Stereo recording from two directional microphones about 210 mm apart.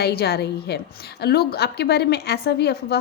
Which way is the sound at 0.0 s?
50° left (ahead or behind).